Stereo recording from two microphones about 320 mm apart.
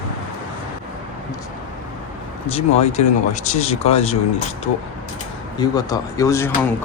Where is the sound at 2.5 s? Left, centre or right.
Centre.